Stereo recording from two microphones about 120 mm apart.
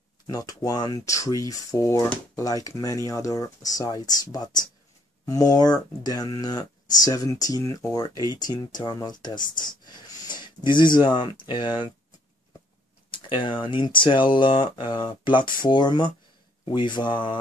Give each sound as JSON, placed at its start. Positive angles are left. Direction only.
{"t": 0.3, "sound": "speech", "side_deg": 30}
{"t": 13.1, "sound": "speech", "side_deg": 45}